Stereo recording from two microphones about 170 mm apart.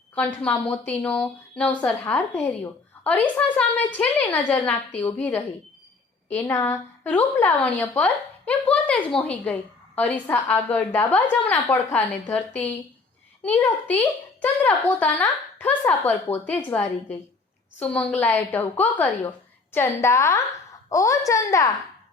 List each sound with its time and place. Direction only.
0.6 s a woman's voice: 5° left (ahead or behind)